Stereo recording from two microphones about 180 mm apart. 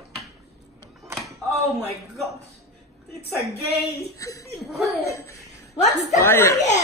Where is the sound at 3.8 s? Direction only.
15° left (ahead or behind).